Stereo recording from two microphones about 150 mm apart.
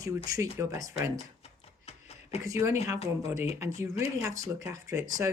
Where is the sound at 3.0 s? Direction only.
40° left (ahead or behind).